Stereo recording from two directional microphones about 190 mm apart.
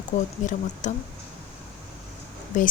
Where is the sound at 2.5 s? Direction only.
40° left (ahead or behind).